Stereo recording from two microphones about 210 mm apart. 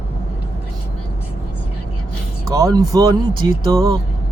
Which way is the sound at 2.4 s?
15° right (ahead or behind).